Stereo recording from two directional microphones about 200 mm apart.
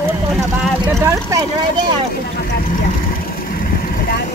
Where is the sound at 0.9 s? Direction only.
15° right (ahead or behind).